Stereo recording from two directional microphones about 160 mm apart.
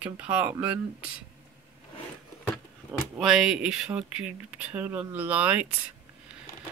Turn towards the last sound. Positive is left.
turn(degrees=-10)  # may be behind; listen again after turning